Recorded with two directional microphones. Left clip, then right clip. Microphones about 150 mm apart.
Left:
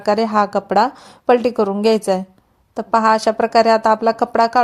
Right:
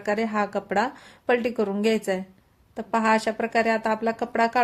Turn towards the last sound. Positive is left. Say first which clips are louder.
# left 9 dB
turn(degrees=35)  # may be behind; listen again after turning